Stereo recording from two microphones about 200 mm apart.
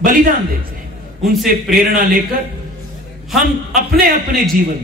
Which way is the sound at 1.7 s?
45° right (ahead or behind).